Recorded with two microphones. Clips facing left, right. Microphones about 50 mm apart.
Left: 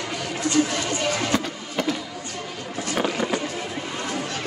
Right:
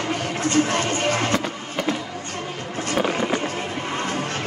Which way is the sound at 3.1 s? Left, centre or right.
Right.